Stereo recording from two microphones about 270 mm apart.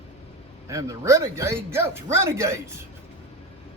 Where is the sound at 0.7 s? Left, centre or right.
Centre.